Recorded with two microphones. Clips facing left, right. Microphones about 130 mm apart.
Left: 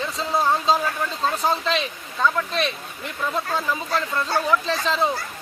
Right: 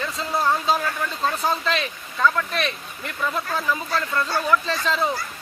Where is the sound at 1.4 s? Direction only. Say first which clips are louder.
Left 1 dB; centre (ahead or behind).